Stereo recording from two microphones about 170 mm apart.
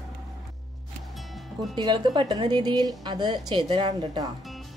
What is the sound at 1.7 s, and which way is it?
A woman's voice, 25° right (ahead or behind).